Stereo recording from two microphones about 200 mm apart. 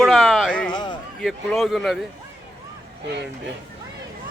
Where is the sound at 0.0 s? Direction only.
Centre (ahead or behind).